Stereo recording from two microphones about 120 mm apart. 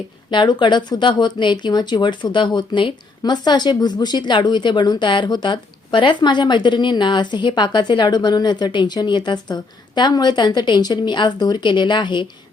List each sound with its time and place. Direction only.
0.3 s speech: 40° left (ahead or behind)